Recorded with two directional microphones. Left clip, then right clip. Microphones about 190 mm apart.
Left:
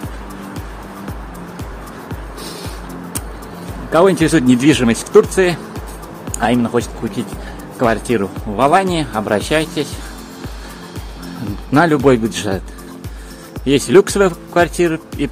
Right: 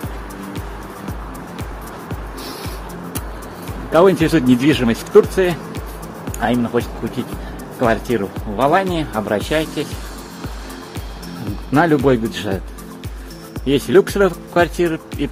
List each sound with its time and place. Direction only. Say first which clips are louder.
3.9 s speech: left 1 dB; 20° left (ahead or behind)
11.7 s speech: left 2 dB; 25° left (ahead or behind)
13.7 s speech: left 3 dB; 25° left (ahead or behind)